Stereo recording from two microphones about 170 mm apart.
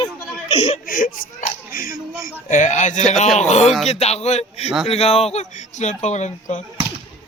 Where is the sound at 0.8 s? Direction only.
55° left (ahead or behind).